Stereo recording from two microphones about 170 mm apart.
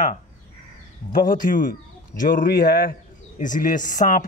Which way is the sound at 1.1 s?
50° left (ahead or behind).